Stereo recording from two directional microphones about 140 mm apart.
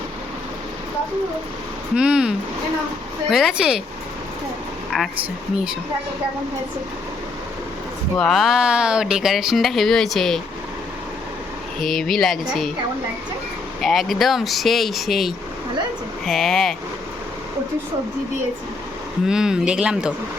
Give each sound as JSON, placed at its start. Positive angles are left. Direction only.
{"t": 2.0, "sound": "speech", "side_deg": -5}
{"t": 4.9, "sound": "speech", "side_deg": -5}
{"t": 8.2, "sound": "speech", "side_deg": 0}
{"t": 11.8, "sound": "speech", "side_deg": 0}
{"t": 13.8, "sound": "speech", "side_deg": 0}
{"t": 19.3, "sound": "speech", "side_deg": -5}